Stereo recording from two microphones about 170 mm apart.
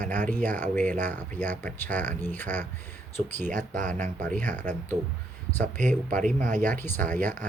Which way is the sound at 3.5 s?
50° right (ahead or behind).